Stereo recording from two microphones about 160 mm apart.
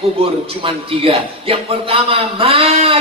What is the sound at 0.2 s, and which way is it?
A man's voice, 35° right (ahead or behind).